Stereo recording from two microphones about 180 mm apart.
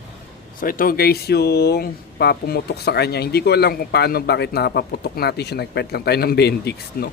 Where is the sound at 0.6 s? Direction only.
50° left (ahead or behind).